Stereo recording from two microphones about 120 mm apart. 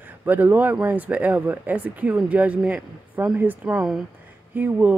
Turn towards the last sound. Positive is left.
turn(degrees=-15)  # may be behind; listen again after turning